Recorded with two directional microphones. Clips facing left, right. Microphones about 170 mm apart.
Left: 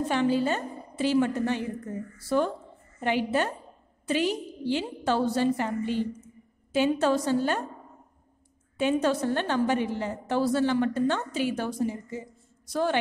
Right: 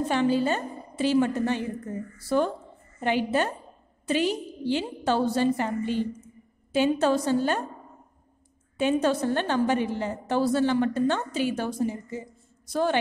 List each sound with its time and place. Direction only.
0.1 s a woman's voice: 30° right (ahead or behind)
8.7 s a woman's voice: 25° right (ahead or behind)